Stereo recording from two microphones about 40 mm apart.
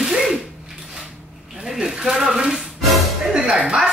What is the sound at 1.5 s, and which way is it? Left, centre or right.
Speech, centre.